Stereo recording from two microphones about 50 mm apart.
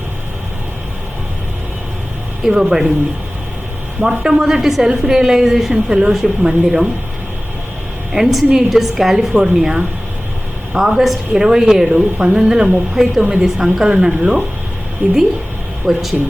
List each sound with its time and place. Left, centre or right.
2.4 s speech: centre
4.0 s a woman's voice: centre
5.7 s speech: centre
8.1 s a woman's voice: centre
15.0 s a woman's voice: right
15.9 s a woman's voice: centre